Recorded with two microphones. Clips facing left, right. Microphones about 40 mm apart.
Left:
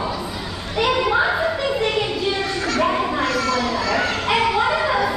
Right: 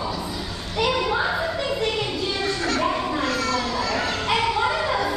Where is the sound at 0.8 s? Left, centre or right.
Centre.